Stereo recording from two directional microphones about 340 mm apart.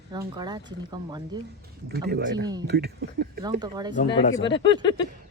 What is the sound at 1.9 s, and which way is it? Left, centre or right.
Speech, right.